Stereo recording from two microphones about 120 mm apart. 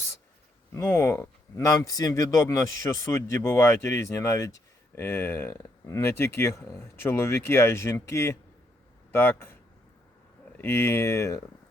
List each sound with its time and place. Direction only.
0.7 s a man's voice: 20° left (ahead or behind)
10.6 s a man's voice: 20° left (ahead or behind)